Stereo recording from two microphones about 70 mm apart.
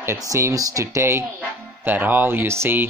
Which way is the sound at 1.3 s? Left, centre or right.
Right.